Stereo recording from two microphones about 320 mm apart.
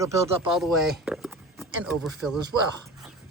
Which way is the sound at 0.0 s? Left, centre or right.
Centre.